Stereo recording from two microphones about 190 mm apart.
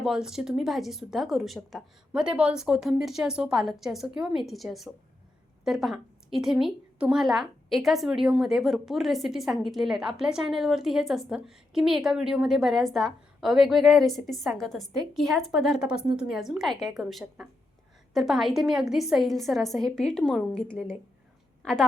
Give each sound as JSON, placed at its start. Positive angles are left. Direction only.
{"t": 0.0, "sound": "a woman's voice", "side_deg": -5}